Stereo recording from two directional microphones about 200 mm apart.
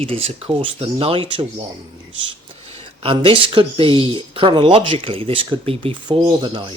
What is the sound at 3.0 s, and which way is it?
Speech, 25° right (ahead or behind).